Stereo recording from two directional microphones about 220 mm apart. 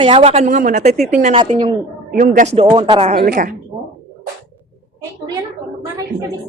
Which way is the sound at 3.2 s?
40° right (ahead or behind).